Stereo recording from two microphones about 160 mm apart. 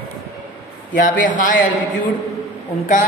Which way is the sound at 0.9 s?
55° left (ahead or behind).